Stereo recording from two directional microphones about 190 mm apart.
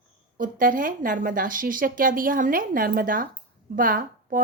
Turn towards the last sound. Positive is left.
turn(degrees=-45)  # may be behind; listen again after turning